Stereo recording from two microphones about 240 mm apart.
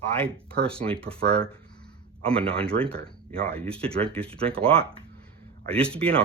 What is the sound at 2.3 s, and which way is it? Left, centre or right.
Speech, centre.